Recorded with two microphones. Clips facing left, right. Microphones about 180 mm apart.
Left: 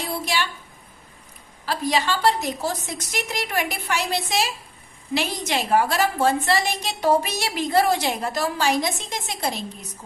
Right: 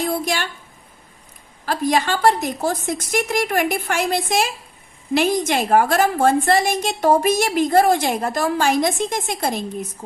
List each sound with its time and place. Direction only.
0.1 s a woman's voice: 50° right (ahead or behind)
1.6 s a woman's voice: 50° right (ahead or behind)